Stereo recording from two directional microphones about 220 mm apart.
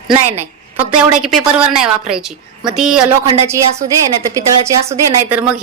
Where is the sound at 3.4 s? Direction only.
15° right (ahead or behind).